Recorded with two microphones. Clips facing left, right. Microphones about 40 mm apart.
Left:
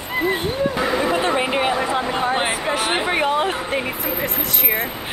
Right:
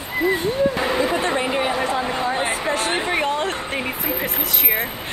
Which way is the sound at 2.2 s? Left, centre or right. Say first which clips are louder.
Left 2 dB; left.